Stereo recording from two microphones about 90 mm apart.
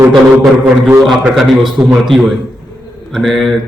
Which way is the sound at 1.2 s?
Centre (ahead or behind).